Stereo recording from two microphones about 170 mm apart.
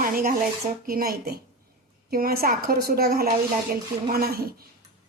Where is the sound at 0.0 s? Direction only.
55° right (ahead or behind).